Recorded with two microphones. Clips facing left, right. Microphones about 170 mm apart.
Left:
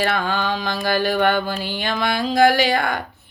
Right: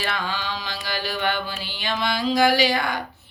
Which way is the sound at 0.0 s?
55° left (ahead or behind).